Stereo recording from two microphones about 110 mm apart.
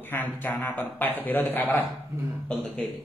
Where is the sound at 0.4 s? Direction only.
15° left (ahead or behind).